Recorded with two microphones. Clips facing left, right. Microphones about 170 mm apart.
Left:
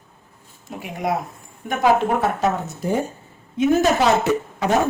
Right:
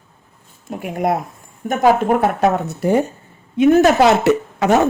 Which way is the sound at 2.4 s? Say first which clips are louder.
Right 5 dB; 65° right (ahead or behind).